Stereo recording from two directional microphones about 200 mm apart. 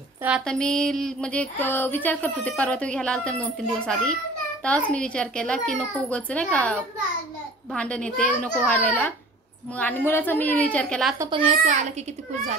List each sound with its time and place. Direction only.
0.5 s a sound: 5° left (ahead or behind)
7.7 s a child's voice: 5° left (ahead or behind)
11.1 s a child's voice: 25° right (ahead or behind)